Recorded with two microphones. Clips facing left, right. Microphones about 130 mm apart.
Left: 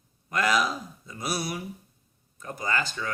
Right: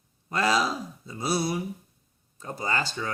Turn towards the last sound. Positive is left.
turn(degrees=-30)  # may be behind; listen again after turning